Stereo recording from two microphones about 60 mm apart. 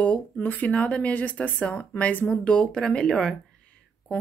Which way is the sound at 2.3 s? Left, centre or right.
Centre.